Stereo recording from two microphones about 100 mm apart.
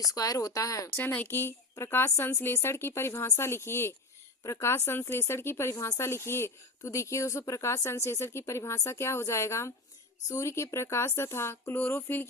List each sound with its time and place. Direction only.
0.0 s speech: 40° left (ahead or behind)
0.9 s speech: 20° left (ahead or behind)